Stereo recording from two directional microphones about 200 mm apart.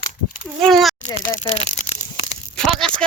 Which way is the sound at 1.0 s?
35° left (ahead or behind).